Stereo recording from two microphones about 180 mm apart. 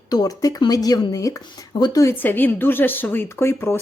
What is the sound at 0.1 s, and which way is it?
Speech, 20° left (ahead or behind).